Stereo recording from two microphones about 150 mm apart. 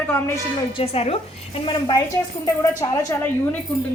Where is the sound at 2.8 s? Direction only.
20° left (ahead or behind).